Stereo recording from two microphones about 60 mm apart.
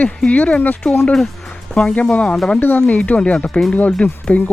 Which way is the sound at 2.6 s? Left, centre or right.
Left.